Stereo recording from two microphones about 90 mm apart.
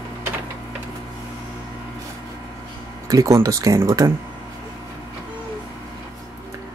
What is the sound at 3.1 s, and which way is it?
Speech, 35° right (ahead or behind).